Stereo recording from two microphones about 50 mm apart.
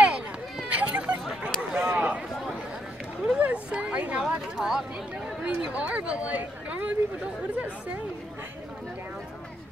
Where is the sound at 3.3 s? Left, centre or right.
Right.